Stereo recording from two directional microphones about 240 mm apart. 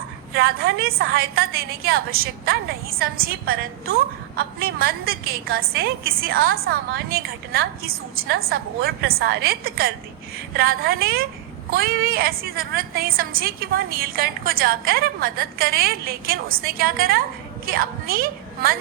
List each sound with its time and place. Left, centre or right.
0.3 s a woman's voice: right